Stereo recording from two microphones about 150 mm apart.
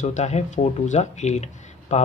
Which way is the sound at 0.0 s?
50° left (ahead or behind).